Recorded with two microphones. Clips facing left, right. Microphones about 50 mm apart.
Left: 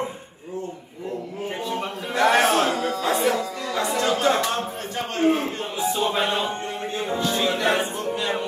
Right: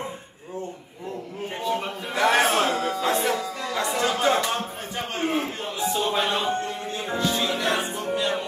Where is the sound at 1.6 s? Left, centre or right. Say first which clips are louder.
Right 4 dB; centre.